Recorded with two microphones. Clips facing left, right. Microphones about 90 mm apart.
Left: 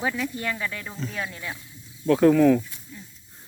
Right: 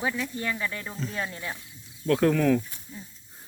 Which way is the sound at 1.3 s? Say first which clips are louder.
Even; 20° right (ahead or behind).